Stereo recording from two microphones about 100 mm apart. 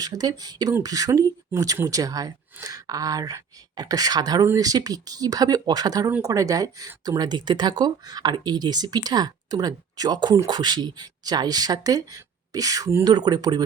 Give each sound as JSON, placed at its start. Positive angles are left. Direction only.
{"t": 0.0, "sound": "speech", "side_deg": -40}
{"t": 13.1, "sound": "speech", "side_deg": -45}